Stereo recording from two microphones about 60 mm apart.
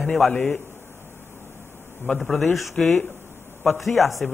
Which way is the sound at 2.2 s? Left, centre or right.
Centre.